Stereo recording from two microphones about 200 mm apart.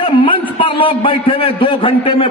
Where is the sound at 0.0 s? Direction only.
25° left (ahead or behind).